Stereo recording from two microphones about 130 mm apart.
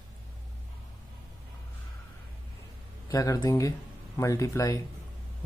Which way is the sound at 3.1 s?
25° left (ahead or behind).